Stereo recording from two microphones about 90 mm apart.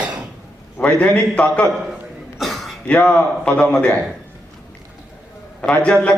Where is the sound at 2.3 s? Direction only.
Centre (ahead or behind).